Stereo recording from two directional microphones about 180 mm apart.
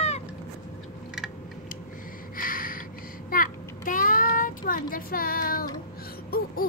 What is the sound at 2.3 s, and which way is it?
Gasp, 50° left (ahead or behind).